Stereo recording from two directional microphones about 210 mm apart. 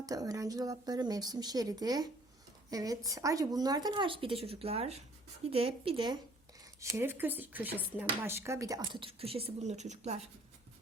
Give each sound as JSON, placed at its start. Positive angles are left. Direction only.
{"t": 0.0, "sound": "speech", "side_deg": -15}
{"t": 6.9, "sound": "speech", "side_deg": -10}